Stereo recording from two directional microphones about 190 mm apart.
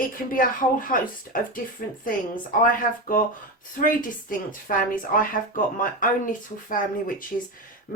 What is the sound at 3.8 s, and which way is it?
Speech, 45° left (ahead or behind).